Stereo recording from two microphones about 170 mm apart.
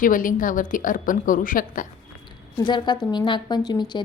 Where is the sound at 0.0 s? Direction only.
55° left (ahead or behind).